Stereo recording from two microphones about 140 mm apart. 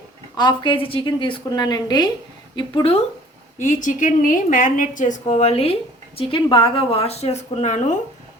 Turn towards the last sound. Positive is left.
turn(degrees=55)  # may be behind; listen again after turning